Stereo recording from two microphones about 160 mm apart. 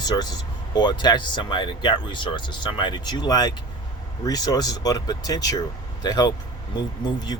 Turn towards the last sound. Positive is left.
turn(degrees=25)  # may be behind; listen again after turning